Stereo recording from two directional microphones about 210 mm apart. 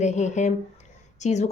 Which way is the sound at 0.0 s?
35° left (ahead or behind).